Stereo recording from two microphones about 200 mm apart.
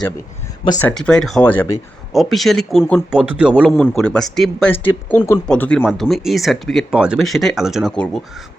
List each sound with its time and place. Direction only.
0.6 s speech: 20° left (ahead or behind)
0.9 s speech: 5° left (ahead or behind)